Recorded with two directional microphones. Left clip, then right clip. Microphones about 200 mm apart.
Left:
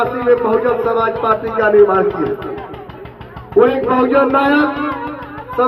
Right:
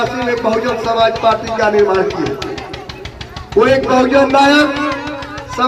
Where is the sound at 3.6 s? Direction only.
45° right (ahead or behind).